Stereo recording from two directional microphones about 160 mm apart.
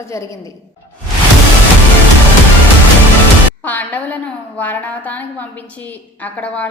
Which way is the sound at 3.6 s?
10° left (ahead or behind).